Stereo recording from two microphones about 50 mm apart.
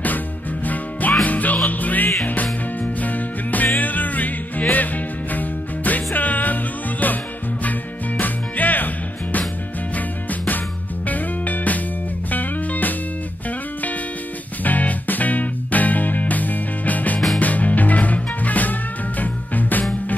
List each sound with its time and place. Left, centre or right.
1.2 s music: left
8.2 s music: left
14.6 s music: left